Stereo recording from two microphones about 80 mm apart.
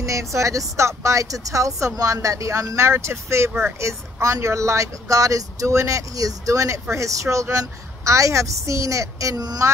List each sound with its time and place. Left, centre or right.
0.0 s speech: right